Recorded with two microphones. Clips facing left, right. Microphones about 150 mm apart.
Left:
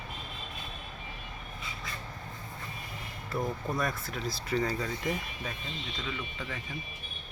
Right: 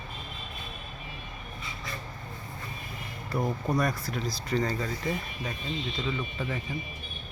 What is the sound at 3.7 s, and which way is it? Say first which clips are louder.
Speech: right 4 dB; centre (ahead or behind).